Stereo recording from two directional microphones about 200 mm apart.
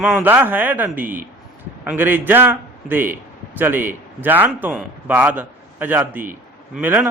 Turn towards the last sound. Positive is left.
turn(degrees=-10)  # may be behind; listen again after turning